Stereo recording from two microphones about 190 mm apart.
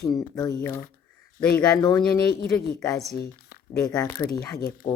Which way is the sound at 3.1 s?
55° left (ahead or behind).